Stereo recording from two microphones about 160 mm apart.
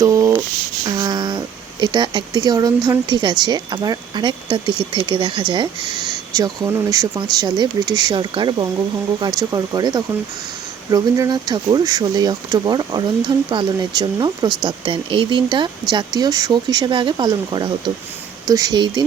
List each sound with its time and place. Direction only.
0.0 s speech: 20° right (ahead or behind)